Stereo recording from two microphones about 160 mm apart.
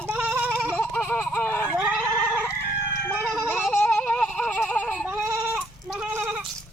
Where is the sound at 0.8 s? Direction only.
5° left (ahead or behind).